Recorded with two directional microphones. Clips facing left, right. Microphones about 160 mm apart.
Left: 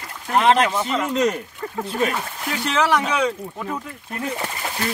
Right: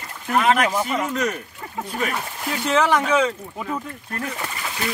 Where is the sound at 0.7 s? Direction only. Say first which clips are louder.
Even; 10° right (ahead or behind).